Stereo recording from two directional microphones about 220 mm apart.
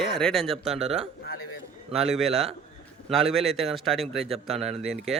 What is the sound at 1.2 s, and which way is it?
Speech, 45° left (ahead or behind).